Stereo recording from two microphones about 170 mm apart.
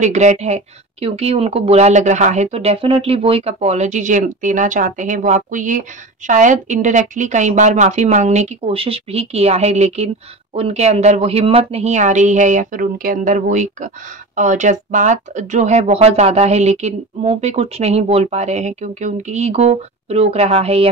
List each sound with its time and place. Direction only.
0.0 s a woman's voice: 45° right (ahead or behind)